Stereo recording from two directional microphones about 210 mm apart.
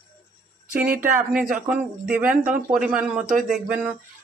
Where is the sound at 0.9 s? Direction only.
40° right (ahead or behind).